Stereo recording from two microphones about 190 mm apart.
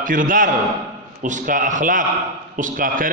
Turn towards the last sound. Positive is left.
turn(degrees=-45)  # may be behind; listen again after turning